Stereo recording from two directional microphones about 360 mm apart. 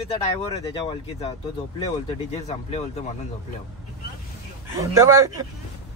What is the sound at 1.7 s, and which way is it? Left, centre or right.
Speech, centre.